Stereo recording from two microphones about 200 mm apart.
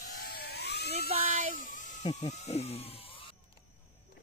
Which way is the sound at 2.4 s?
30° left (ahead or behind).